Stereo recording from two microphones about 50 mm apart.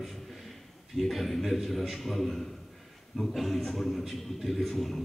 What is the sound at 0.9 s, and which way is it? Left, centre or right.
A man's voice, centre.